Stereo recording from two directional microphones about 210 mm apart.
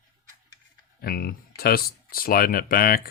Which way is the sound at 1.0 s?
45° left (ahead or behind).